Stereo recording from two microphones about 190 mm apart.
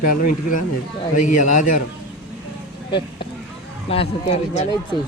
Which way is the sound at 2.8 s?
25° left (ahead or behind).